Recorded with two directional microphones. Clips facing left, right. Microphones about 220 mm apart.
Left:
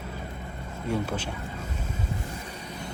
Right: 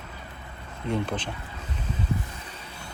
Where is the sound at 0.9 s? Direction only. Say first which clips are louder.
Right 1 dB; 10° left (ahead or behind).